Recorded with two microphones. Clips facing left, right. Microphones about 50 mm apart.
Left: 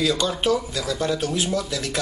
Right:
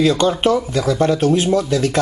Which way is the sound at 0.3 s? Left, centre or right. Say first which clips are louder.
Right 6 dB; right.